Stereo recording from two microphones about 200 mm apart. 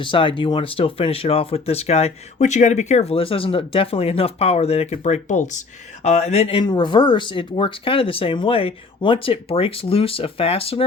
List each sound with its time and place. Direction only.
0.0 s speech: 25° left (ahead or behind)